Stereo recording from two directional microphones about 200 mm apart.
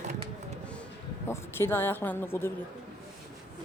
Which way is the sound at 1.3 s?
10° left (ahead or behind).